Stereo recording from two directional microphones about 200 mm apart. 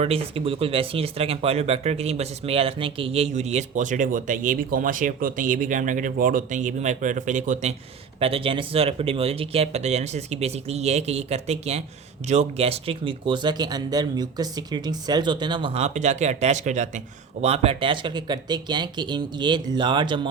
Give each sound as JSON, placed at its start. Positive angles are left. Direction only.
{"t": 0.0, "sound": "speech", "side_deg": -30}